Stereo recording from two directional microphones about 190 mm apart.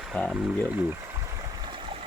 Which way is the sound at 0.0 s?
Centre (ahead or behind).